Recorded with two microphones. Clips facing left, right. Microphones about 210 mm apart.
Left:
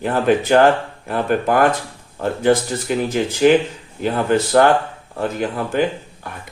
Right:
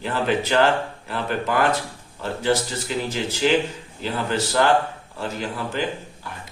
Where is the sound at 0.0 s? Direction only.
50° left (ahead or behind).